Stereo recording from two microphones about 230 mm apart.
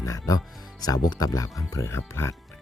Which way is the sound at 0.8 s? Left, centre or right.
Centre.